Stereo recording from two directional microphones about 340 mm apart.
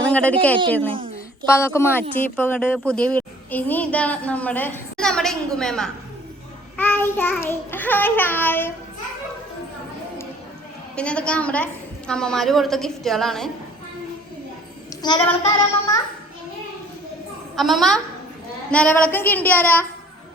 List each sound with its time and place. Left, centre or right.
0.0 s a sound: centre
0.9 s a sound: centre
1.5 s a child's voice: centre
10.9 s a child's voice: centre
15.0 s speech: centre
17.6 s a child's voice: centre